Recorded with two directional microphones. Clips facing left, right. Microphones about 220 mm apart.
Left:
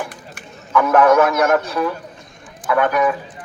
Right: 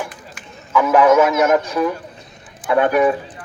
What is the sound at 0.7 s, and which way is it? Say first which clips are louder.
A man's voice: even; 5° right (ahead or behind).